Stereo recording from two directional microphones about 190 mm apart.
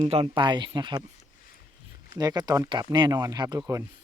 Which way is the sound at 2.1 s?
20° right (ahead or behind).